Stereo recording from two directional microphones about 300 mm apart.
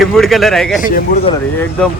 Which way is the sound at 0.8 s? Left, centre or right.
Left.